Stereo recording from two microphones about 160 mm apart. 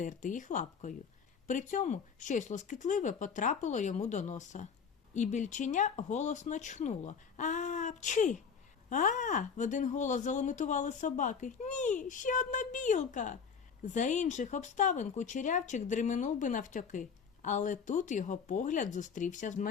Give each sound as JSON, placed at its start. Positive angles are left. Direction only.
{"t": 0.0, "sound": "speech", "side_deg": 55}